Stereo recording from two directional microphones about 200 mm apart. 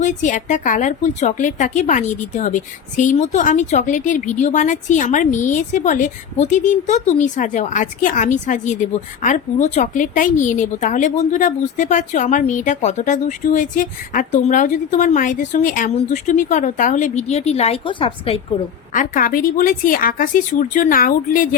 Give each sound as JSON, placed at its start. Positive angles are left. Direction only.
{"t": 0.0, "sound": "a woman's voice", "side_deg": 40}
{"t": 18.9, "sound": "a woman's voice", "side_deg": 40}